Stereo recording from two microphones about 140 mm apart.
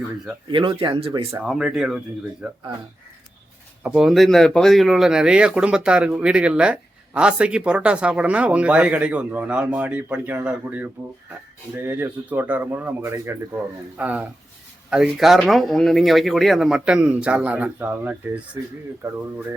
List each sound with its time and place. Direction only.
0.5 s speech: 40° right (ahead or behind)
1.5 s speech: 5° right (ahead or behind)
3.8 s a man's voice: 5° right (ahead or behind)